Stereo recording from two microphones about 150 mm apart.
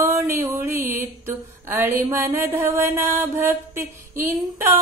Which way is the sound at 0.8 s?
15° right (ahead or behind).